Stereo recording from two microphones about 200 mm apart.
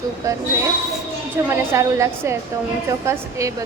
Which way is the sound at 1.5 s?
15° right (ahead or behind).